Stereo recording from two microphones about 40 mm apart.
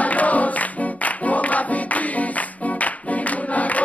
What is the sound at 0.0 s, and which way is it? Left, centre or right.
Music, left.